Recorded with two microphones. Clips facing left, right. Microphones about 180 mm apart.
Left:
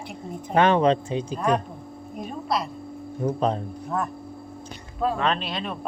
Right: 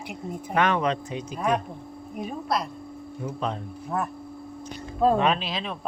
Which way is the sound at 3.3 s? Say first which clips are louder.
Left 7 dB; 35° left (ahead or behind).